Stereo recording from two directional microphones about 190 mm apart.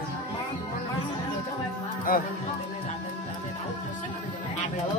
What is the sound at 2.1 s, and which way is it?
Speech, 45° left (ahead or behind).